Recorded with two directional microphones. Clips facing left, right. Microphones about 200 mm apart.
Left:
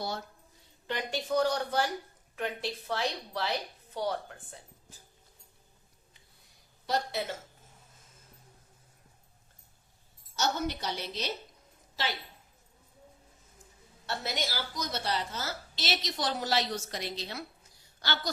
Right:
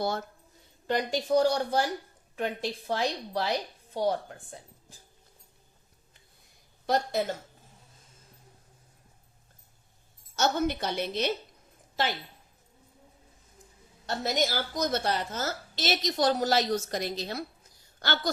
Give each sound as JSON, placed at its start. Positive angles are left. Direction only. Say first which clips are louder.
{"t": 0.0, "sound": "speech", "louder": "right 6 dB", "side_deg": -50}
{"t": 0.9, "sound": "a woman's voice", "louder": "right 6 dB", "side_deg": -40}
{"t": 6.8, "sound": "a woman's voice", "louder": "right 5 dB", "side_deg": -50}
{"t": 10.3, "sound": "a woman's voice", "louder": "right 5 dB", "side_deg": -55}
{"t": 14.1, "sound": "a woman's voice", "louder": "right 6 dB", "side_deg": -45}